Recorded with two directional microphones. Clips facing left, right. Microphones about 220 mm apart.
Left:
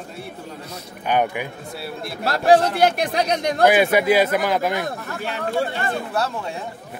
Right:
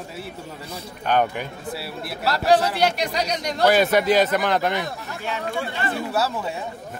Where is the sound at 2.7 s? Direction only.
50° left (ahead or behind).